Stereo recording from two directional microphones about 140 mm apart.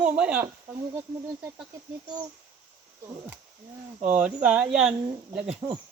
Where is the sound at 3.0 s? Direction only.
20° right (ahead or behind).